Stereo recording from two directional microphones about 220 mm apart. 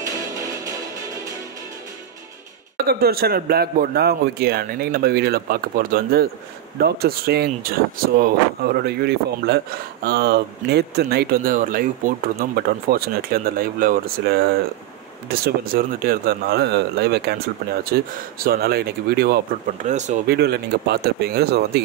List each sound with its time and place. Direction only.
0.0 s music: 15° right (ahead or behind)
2.9 s speech: 45° right (ahead or behind)
20.2 s speech: 50° right (ahead or behind)